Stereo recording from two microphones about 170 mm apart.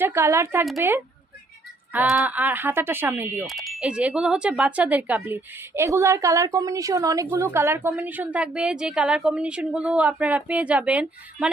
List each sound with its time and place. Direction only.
0.0 s speech: 15° right (ahead or behind)
3.4 s speech: centre (ahead or behind)